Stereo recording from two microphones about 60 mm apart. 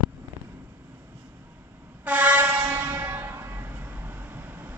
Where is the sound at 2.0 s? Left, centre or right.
Right.